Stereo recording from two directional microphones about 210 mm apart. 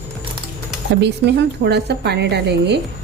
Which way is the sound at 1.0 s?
55° right (ahead or behind).